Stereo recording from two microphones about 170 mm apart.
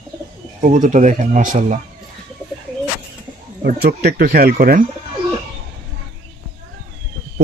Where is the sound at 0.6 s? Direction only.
50° right (ahead or behind).